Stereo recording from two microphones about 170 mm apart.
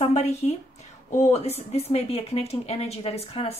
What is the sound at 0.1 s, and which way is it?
Speech, 40° left (ahead or behind).